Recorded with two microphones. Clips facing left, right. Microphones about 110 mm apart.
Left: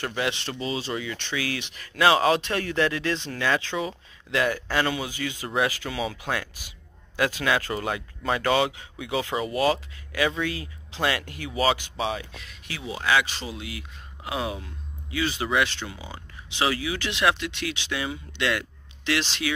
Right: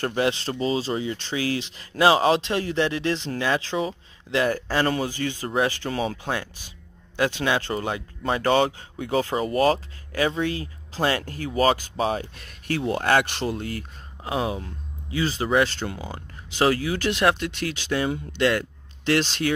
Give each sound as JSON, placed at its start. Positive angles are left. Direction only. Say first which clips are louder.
{"t": 0.0, "sound": "speech", "louder": "right 5 dB", "side_deg": -40}
{"t": 13.6, "sound": "speech", "louder": "right 6 dB", "side_deg": -45}